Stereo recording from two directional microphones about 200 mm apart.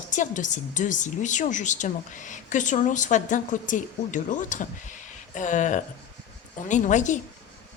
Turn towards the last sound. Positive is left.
turn(degrees=40)  # may be behind; listen again after turning